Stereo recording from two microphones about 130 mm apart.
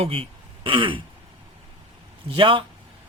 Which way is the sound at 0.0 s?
45° right (ahead or behind).